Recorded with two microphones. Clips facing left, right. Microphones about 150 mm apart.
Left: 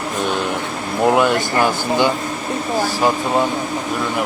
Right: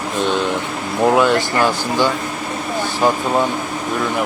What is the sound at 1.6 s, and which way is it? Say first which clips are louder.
Speech: even; 15° left (ahead or behind).